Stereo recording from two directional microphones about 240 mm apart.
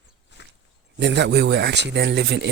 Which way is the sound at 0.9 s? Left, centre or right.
Right.